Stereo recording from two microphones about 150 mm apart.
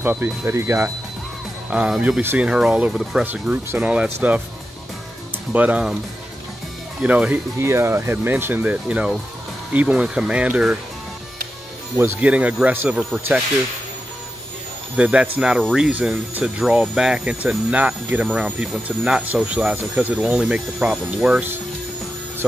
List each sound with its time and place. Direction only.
0.0 s speech: 10° right (ahead or behind)
1.7 s speech: 5° right (ahead or behind)
5.5 s speech: 10° right (ahead or behind)
7.0 s speech: 10° right (ahead or behind)
12.0 s speech: 10° right (ahead or behind)
15.0 s speech: 5° right (ahead or behind)